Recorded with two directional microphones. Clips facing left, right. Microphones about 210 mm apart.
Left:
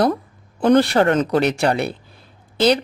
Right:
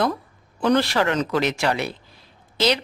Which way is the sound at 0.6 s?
50° left (ahead or behind).